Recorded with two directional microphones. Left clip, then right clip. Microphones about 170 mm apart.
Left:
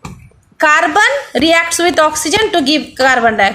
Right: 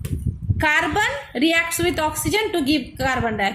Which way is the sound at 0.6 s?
40° left (ahead or behind).